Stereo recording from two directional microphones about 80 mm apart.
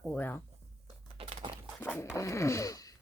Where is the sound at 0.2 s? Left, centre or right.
Left.